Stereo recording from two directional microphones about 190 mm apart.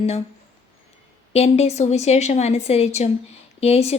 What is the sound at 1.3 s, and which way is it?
A woman's voice, 35° left (ahead or behind).